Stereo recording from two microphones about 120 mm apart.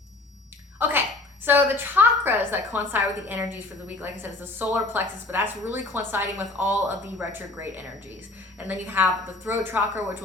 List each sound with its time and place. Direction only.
0.8 s a woman's voice: 15° right (ahead or behind)